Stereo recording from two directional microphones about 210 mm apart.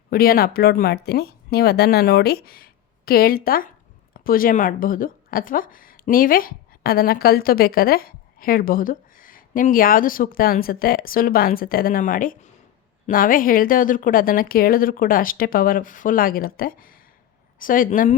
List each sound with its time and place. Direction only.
0.1 s a woman's voice: 45° left (ahead or behind)